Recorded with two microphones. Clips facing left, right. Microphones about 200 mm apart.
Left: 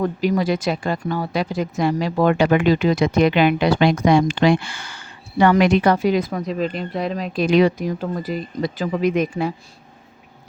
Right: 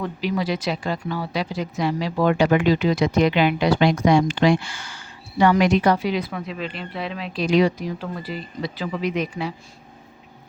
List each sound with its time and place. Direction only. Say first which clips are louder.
0.0 s speech: left 5 dB; 45° left (ahead or behind)